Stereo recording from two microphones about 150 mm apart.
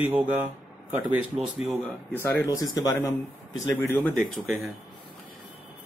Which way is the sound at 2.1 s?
15° left (ahead or behind).